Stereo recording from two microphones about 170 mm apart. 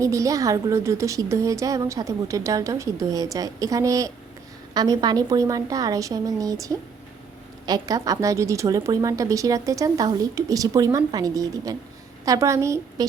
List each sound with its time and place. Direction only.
0.0 s a woman's voice: 20° right (ahead or behind)